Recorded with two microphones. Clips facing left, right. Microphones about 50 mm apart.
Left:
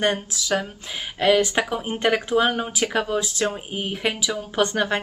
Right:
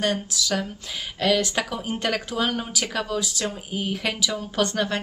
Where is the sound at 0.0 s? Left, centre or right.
Left.